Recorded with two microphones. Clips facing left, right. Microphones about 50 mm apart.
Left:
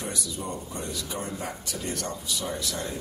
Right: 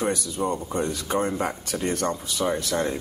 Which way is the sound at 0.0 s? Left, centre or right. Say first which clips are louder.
Right 9 dB; right.